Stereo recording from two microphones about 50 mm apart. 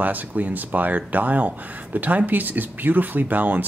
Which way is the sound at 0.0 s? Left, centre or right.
Right.